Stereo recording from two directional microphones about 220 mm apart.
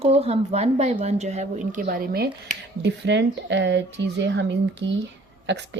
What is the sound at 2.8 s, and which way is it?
A woman's voice, 55° right (ahead or behind).